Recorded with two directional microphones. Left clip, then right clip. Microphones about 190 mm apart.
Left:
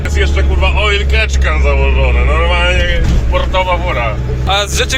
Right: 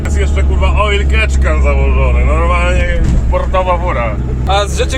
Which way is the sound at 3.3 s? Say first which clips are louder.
Even; 20° right (ahead or behind).